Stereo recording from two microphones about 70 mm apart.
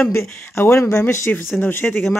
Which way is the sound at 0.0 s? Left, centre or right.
Left.